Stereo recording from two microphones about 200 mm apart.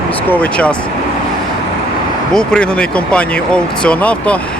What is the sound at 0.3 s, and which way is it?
Speech, 5° left (ahead or behind).